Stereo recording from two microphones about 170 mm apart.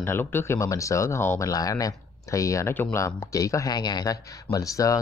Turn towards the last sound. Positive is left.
turn(degrees=20)  # may be behind; listen again after turning